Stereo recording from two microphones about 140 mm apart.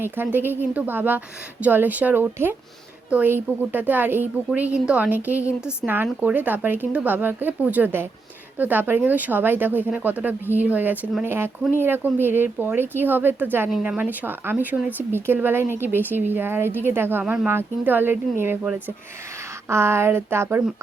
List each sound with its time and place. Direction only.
0.0 s speech: 15° right (ahead or behind)